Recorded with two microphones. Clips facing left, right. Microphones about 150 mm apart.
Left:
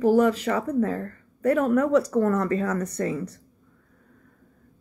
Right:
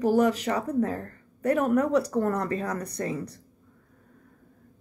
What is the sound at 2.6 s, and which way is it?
Speech, 35° right (ahead or behind).